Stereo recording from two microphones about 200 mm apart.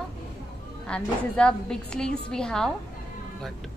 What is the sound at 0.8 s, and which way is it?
A woman's voice, 5° left (ahead or behind).